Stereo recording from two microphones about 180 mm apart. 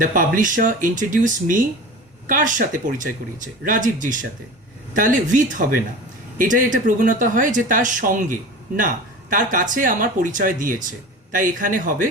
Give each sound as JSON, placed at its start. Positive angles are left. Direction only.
{"t": 0.0, "sound": "speech", "side_deg": -50}